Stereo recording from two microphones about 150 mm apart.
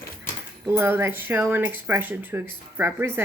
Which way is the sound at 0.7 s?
15° right (ahead or behind).